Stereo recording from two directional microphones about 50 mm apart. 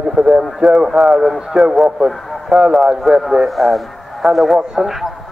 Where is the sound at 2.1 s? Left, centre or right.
Centre.